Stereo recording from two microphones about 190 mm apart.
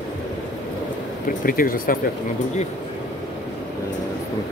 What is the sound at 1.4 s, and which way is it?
Speech, 50° left (ahead or behind).